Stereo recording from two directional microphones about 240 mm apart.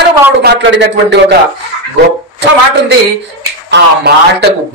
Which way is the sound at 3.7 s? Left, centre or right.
Right.